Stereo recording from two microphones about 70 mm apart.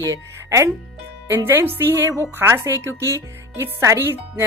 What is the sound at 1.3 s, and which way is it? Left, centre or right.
A woman's voice, right.